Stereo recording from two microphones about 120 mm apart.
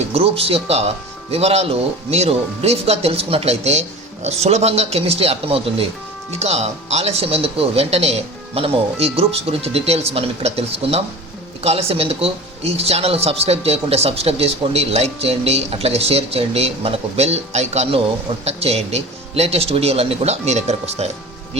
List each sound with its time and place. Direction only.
0.1 s speech: 55° right (ahead or behind)